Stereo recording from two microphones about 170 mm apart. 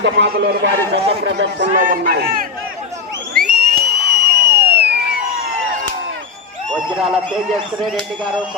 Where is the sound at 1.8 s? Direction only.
55° right (ahead or behind).